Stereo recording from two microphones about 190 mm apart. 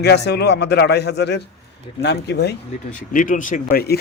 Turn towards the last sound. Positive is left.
turn(degrees=50)  # may be behind; listen again after turning